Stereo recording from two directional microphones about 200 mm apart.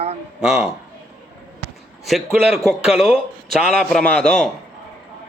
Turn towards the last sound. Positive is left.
turn(degrees=5)  # may be behind; listen again after turning